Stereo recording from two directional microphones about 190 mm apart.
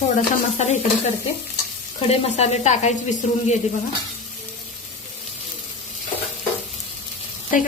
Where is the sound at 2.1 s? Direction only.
35° left (ahead or behind).